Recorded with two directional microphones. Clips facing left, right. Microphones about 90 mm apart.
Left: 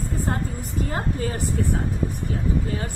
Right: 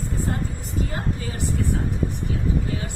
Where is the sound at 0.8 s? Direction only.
40° left (ahead or behind).